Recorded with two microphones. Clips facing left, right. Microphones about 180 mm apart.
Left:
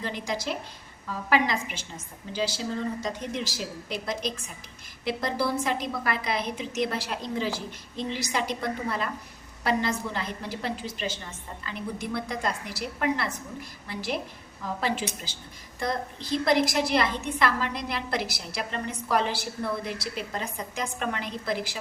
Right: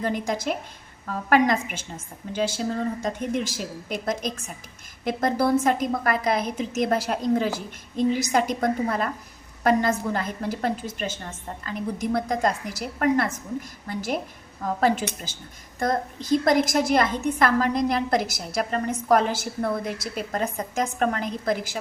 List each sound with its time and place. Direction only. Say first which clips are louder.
0.0 s a woman's voice: right 5 dB; 50° right (ahead or behind)